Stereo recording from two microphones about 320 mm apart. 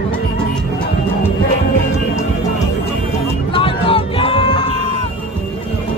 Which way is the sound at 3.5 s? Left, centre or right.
Centre.